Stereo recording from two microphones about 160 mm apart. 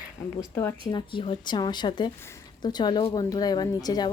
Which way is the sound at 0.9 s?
30° left (ahead or behind).